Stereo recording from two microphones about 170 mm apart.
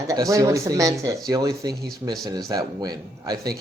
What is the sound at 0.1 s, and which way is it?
A woman's voice, 20° right (ahead or behind).